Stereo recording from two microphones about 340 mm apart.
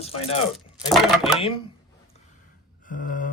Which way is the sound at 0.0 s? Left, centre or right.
Centre.